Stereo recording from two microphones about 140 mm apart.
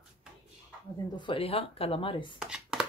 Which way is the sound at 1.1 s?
40° left (ahead or behind).